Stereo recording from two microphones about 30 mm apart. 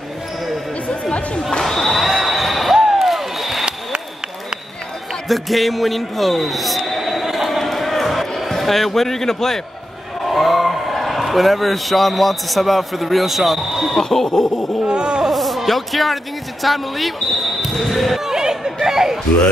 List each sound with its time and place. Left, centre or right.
1.6 s basketball bounce: centre
2.0 s a sound: centre
2.7 s basketball bounce: centre
5.3 s speech: centre
7.2 s basketball bounce: centre
7.5 s basketball bounce: centre
8.5 s speech: centre
10.2 s a man's voice: centre
14.0 s a sound: centre
14.9 s speech: right
15.2 s music: centre
16.6 s speech: centre
18.2 s a sound: centre